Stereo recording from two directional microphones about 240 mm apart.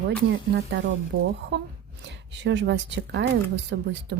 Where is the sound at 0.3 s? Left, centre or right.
Right.